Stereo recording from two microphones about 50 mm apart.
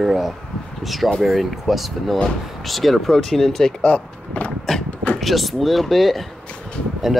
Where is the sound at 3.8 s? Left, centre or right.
Left.